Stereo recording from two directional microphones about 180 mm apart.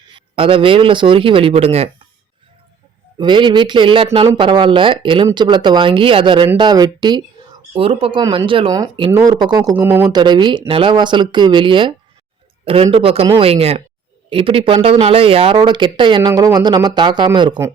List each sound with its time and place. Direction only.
0.1 s speech: 30° right (ahead or behind)
3.2 s speech: 25° right (ahead or behind)